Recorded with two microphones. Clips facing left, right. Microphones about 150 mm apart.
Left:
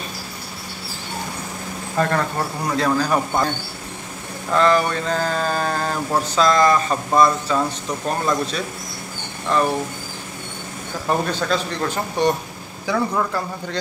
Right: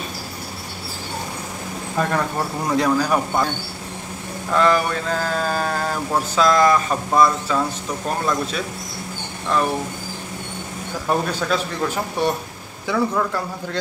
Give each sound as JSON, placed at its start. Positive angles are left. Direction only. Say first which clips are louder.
{"t": 2.0, "sound": "a man's voice", "louder": "left 1 dB", "side_deg": -5}
{"t": 4.5, "sound": "mantra", "louder": "left 1 dB", "side_deg": -5}
{"t": 11.1, "sound": "mantra", "louder": "even", "side_deg": -5}